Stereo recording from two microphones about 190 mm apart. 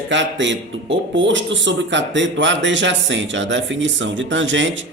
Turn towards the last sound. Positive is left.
turn(degrees=-75)  # may be behind; listen again after turning